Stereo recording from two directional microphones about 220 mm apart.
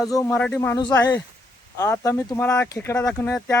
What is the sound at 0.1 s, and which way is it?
Speech, 10° left (ahead or behind).